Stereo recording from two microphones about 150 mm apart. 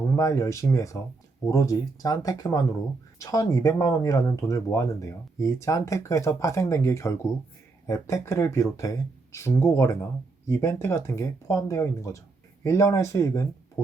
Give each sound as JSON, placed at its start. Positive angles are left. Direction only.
{"t": 0.2, "sound": "speech", "side_deg": 20}